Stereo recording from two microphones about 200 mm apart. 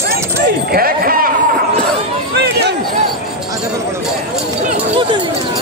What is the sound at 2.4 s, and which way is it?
Basketball bounce, 55° right (ahead or behind).